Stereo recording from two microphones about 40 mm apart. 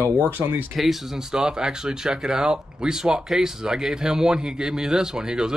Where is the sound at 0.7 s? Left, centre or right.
Centre.